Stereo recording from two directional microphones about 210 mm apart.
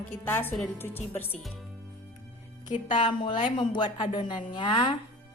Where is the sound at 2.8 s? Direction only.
25° left (ahead or behind).